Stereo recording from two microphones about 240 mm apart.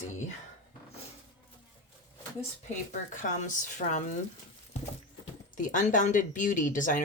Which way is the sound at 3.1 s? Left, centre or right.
Left.